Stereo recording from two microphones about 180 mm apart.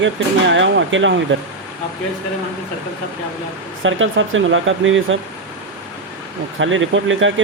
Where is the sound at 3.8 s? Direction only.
90° right.